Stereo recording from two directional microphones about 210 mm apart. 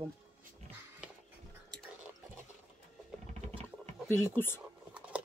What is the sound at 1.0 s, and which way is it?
Music, 5° right (ahead or behind).